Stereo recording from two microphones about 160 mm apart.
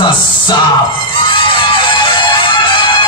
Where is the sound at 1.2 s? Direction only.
30° left (ahead or behind).